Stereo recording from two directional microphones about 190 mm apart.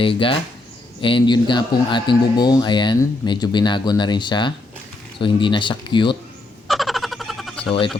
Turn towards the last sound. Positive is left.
turn(degrees=0)  # may be behind; listen again after turning